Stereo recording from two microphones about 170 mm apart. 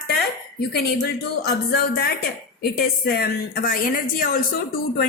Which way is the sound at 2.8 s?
65° left (ahead or behind).